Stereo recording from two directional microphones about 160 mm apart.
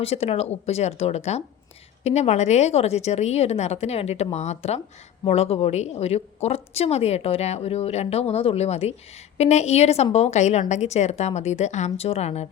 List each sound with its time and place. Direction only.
0.0 s a woman's voice: 40° left (ahead or behind)